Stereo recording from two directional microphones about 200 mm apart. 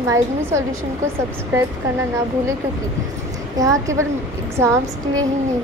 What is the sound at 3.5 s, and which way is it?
A woman's voice, 15° right (ahead or behind).